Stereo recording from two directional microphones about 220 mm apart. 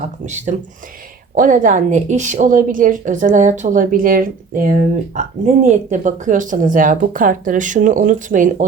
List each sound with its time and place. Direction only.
0.3 s a woman's voice: 35° right (ahead or behind)